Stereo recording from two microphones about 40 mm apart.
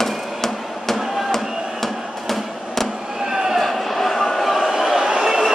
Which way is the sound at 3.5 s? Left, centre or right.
Centre.